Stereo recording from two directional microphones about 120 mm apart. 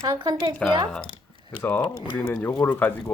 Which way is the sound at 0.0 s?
40° right (ahead or behind).